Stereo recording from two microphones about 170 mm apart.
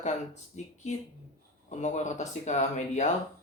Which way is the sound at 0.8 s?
45° left (ahead or behind).